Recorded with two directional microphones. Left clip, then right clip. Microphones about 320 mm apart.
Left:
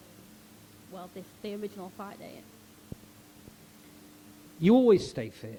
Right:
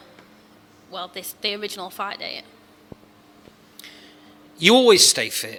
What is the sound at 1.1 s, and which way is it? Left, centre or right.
A man's voice, centre.